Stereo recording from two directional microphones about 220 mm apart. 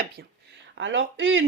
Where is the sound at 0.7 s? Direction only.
60° right (ahead or behind).